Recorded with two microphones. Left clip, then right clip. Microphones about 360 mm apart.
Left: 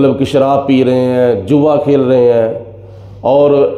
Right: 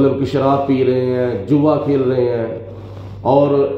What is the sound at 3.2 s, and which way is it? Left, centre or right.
Speech, left.